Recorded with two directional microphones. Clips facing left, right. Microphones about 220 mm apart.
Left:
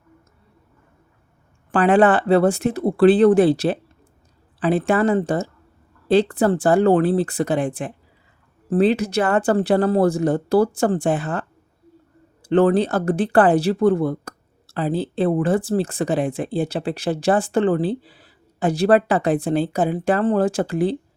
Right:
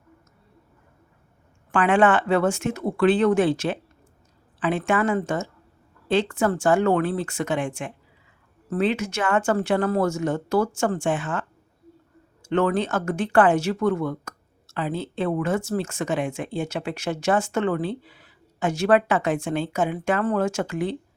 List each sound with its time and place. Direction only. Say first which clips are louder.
1.7 s speech: left 4 dB; 35° left (ahead or behind)